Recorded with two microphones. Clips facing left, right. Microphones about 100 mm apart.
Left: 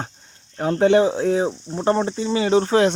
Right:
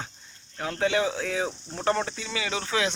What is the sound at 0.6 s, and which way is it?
Speech, 40° left (ahead or behind).